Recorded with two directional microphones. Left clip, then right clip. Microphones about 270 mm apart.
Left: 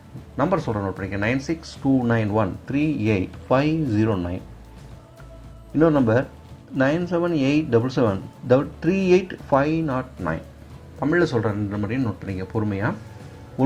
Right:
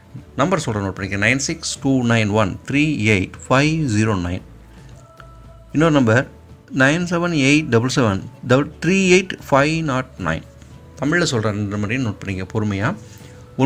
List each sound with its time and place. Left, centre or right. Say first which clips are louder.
0.3 s speech: right 3 dB; right
5.7 s speech: right 3 dB; right